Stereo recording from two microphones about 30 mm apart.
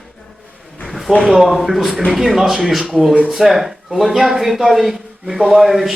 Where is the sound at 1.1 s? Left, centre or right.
Centre.